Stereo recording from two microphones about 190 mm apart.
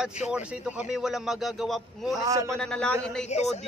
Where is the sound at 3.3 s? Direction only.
35° left (ahead or behind).